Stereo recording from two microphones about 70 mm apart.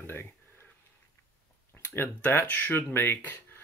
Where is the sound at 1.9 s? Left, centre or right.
Left.